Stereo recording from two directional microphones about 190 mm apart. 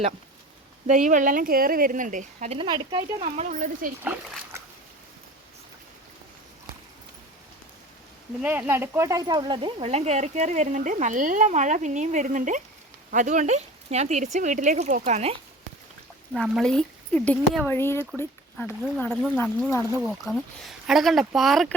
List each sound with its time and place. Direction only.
0.9 s a woman's voice: 45° right (ahead or behind)
4.0 s speech: 10° right (ahead or behind)
8.4 s speech: 10° right (ahead or behind); by 15.4 s 35° right (ahead or behind)
16.3 s speech: centre (ahead or behind)
20.1 s speech: centre (ahead or behind)